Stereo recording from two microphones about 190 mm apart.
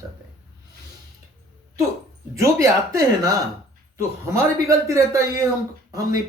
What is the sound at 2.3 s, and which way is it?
A man's voice, 15° right (ahead or behind).